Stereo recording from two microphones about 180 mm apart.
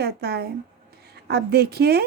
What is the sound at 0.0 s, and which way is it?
A woman's voice, 65° right (ahead or behind).